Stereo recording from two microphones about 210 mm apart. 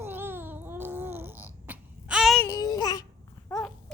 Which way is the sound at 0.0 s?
10° right (ahead or behind).